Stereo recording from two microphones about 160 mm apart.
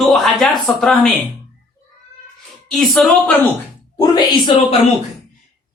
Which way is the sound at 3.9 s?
25° left (ahead or behind).